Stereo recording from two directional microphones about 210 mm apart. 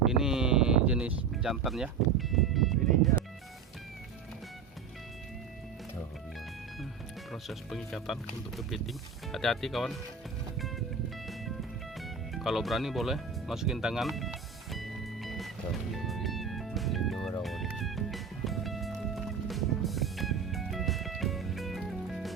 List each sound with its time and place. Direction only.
0.0 s sheep: centre (ahead or behind)
7.3 s speech: centre (ahead or behind)
11.9 s music: centre (ahead or behind)